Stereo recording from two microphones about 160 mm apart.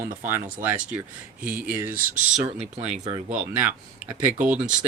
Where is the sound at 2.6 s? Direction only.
45° right (ahead or behind).